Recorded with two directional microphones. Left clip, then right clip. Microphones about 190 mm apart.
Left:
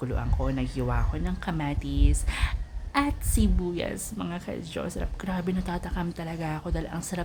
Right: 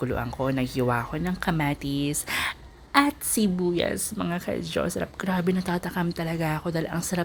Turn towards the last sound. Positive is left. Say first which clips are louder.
# right 5 dB
turn(degrees=-20)  # may be behind; listen again after turning